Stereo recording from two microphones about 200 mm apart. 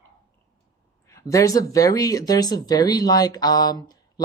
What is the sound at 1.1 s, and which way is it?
Speech, 15° left (ahead or behind).